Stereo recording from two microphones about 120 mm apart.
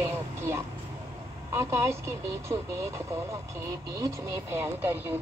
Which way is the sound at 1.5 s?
25° right (ahead or behind).